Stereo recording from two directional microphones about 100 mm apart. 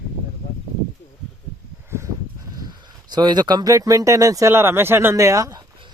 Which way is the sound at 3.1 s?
45° right (ahead or behind).